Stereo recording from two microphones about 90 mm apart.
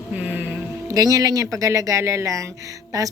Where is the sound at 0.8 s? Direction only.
40° right (ahead or behind).